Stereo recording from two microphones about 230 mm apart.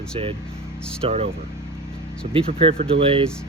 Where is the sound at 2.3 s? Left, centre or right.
Right.